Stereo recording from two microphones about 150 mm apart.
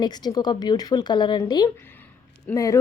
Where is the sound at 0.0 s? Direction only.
25° left (ahead or behind).